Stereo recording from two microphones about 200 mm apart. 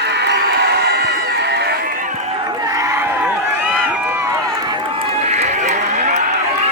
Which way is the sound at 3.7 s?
5° right (ahead or behind).